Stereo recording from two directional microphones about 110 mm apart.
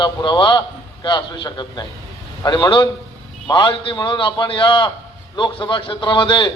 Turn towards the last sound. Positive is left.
turn(degrees=45)  # may be behind; listen again after turning